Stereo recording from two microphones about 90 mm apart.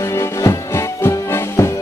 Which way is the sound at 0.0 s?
30° left (ahead or behind).